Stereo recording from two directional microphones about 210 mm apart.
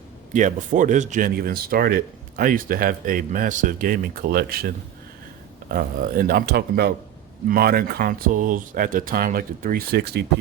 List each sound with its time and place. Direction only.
0.3 s speech: 40° right (ahead or behind)
5.7 s speech: 45° right (ahead or behind)